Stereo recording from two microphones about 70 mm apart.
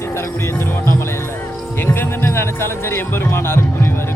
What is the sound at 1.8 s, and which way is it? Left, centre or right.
Music, left.